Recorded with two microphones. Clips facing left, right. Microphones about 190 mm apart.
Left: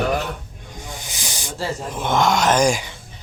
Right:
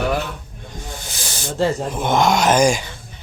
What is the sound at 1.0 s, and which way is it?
Snake, 15° left (ahead or behind).